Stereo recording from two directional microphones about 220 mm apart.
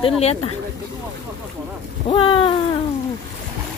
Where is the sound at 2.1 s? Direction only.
20° left (ahead or behind).